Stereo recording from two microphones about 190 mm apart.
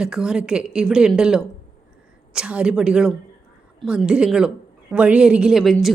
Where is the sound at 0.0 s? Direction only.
5° right (ahead or behind).